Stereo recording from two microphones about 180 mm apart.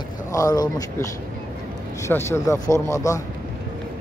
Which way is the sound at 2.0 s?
15° left (ahead or behind).